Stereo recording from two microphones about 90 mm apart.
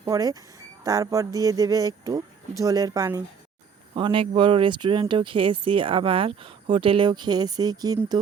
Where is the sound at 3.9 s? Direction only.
70° right (ahead or behind).